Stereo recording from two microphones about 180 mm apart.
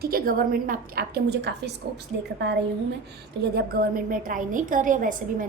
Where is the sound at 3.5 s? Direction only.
55° right (ahead or behind).